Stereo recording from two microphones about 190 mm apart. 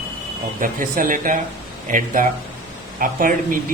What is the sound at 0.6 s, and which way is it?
A man's voice, 45° right (ahead or behind).